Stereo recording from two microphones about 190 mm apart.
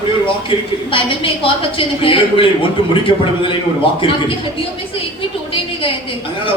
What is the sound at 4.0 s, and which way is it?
Speech, 30° left (ahead or behind).